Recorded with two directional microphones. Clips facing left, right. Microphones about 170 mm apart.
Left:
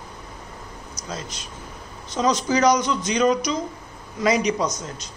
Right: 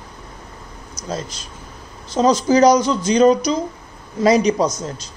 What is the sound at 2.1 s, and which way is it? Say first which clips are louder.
Speech: right 6 dB; 30° right (ahead or behind).